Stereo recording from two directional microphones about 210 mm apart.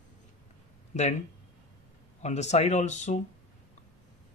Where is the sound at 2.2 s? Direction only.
35° left (ahead or behind).